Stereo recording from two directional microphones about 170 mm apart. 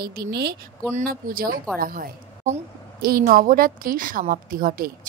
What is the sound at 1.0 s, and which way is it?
A woman's voice, 60° right (ahead or behind).